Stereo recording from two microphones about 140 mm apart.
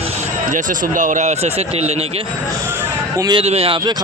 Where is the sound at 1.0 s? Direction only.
60° right (ahead or behind).